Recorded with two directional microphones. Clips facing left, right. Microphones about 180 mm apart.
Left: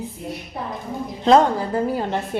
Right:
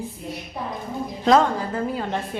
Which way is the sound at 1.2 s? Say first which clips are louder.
Left 3 dB; 30° left (ahead or behind).